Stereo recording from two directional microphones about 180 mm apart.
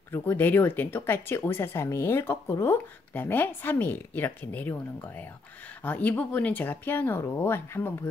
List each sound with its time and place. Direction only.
0.1 s speech: 10° left (ahead or behind)